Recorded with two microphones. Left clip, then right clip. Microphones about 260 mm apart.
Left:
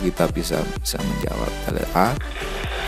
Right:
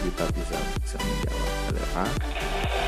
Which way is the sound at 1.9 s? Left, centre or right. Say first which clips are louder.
Left 11 dB; left.